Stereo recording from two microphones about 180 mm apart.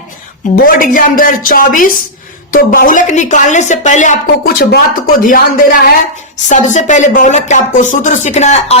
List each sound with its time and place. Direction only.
0.5 s speech: 50° left (ahead or behind)